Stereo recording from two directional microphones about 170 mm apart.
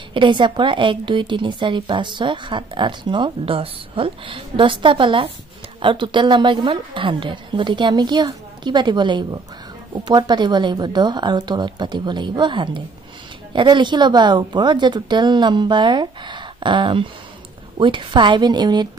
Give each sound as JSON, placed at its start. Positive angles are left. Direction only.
{"t": 0.1, "sound": "a woman's voice", "side_deg": -30}